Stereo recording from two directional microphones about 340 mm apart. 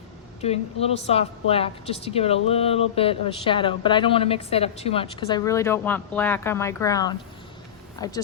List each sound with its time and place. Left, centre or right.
0.4 s a woman's voice: centre